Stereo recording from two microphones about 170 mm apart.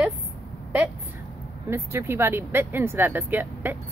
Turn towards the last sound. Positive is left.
turn(degrees=-10)  # may be behind; listen again after turning